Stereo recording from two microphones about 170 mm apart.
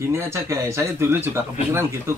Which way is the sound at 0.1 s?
15° right (ahead or behind).